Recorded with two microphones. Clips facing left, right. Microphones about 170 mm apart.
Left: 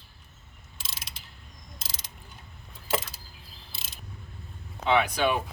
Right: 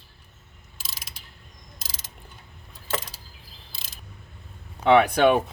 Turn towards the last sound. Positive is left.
turn(degrees=-60)  # may be behind; listen again after turning